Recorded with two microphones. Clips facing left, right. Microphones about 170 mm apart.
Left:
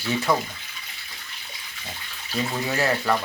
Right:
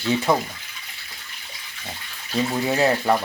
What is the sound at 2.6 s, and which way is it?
Speech, 20° right (ahead or behind).